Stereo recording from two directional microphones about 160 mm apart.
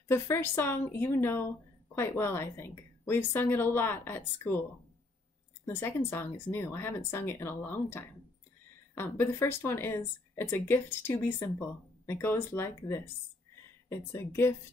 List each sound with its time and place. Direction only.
0.1 s a woman's voice: 15° left (ahead or behind)
5.7 s a woman's voice: 15° left (ahead or behind)